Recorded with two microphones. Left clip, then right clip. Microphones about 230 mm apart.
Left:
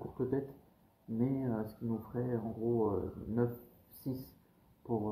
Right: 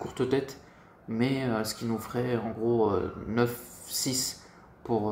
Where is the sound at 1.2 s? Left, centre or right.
Centre.